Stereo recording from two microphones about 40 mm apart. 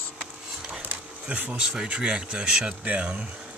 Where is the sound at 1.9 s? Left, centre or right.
Right.